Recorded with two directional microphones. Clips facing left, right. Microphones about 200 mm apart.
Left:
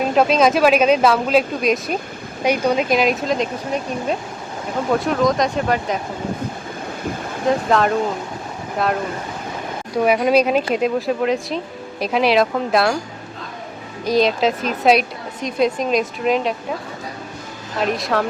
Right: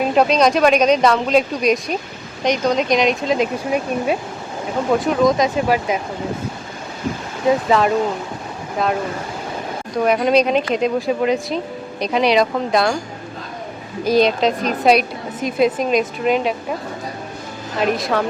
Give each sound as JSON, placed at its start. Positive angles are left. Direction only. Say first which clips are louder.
{"t": 0.0, "sound": "speech", "louder": "even", "side_deg": 0}
{"t": 7.7, "sound": "speech", "louder": "left 1 dB", "side_deg": 0}
{"t": 10.0, "sound": "speech", "louder": "even", "side_deg": 5}
{"t": 14.0, "sound": "speech", "louder": "right 2 dB", "side_deg": 0}
{"t": 17.7, "sound": "speech", "louder": "right 1 dB", "side_deg": 0}